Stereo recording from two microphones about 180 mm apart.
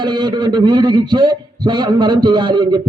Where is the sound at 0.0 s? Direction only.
25° right (ahead or behind).